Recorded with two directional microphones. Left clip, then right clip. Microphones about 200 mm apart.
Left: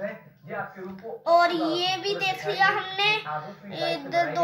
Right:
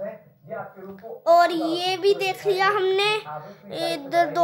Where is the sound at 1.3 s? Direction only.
60° right (ahead or behind).